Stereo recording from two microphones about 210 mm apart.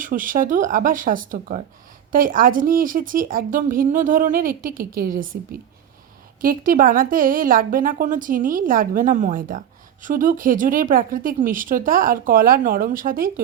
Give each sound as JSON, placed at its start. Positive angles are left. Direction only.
{"t": 0.0, "sound": "a woman's voice", "side_deg": -40}